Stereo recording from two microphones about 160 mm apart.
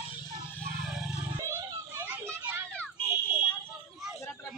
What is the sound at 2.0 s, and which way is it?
Children playing, 15° right (ahead or behind).